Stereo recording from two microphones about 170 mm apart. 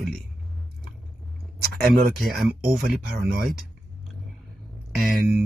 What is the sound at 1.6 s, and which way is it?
Speech, 60° right (ahead or behind).